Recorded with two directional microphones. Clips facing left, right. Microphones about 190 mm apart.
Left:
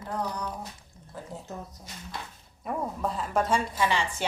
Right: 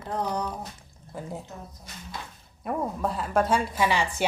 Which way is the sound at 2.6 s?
Centre (ahead or behind).